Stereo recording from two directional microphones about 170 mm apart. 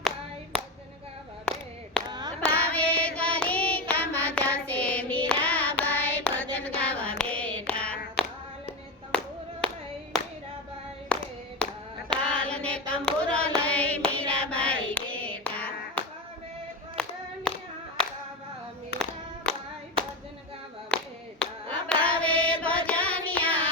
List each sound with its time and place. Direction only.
2.0 s a sound: 25° right (ahead or behind)
2.4 s child singing: 10° left (ahead or behind)
6.7 s hands: 10° left (ahead or behind)
9.1 s clapping: 5° left (ahead or behind)
11.1 s clapping: 5° left (ahead or behind)
12.1 s hands: 5° left (ahead or behind)
14.8 s clapping: 10° left (ahead or behind)
18.9 s clapping: 75° left (ahead or behind)
19.5 s clapping: 5° left (ahead or behind)
20.9 s clapping: 5° left (ahead or behind)
21.4 s a sound: 5° left (ahead or behind)